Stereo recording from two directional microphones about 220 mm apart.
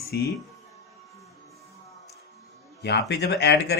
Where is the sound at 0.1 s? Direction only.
45° left (ahead or behind).